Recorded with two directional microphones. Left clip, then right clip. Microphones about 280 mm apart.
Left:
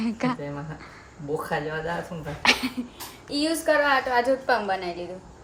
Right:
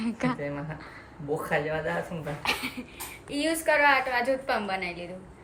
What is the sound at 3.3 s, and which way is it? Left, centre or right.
A woman's voice, centre.